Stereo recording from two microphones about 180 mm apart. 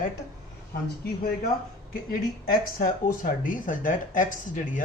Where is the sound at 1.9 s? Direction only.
50° left (ahead or behind).